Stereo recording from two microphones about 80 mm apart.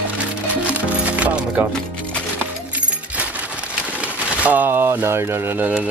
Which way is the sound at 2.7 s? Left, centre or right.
Centre.